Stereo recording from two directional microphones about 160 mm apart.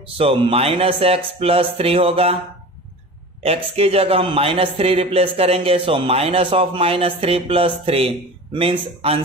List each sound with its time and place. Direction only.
0.2 s a man's voice: 35° right (ahead or behind)
3.4 s a man's voice: 40° right (ahead or behind)